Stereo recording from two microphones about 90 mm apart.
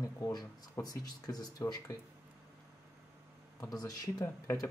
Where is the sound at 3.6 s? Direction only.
40° left (ahead or behind).